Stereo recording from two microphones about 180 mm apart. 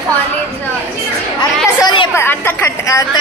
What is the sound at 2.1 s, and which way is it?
Speech, 15° left (ahead or behind).